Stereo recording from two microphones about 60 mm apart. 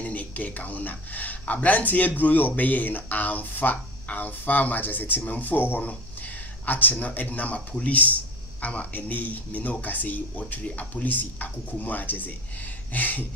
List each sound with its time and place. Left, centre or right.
0.0 s speech: left